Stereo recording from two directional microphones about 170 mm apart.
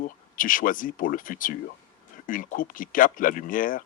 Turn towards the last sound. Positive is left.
turn(degrees=55)  # may be behind; listen again after turning